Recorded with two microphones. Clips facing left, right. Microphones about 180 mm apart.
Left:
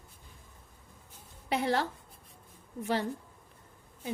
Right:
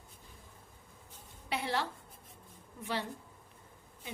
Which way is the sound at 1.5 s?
45° left (ahead or behind).